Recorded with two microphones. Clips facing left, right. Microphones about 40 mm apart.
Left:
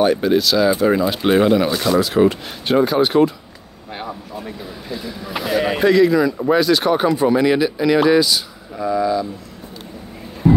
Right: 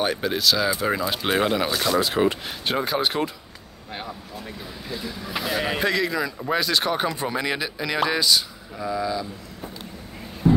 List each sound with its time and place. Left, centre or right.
0.0 s speech: centre
4.5 s speech: centre
10.4 s vehicle: centre